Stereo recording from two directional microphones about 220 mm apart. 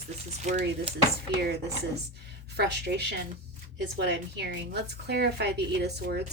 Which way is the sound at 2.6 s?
50° right (ahead or behind).